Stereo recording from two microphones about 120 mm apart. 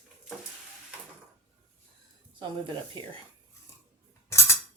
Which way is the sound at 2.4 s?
40° right (ahead or behind).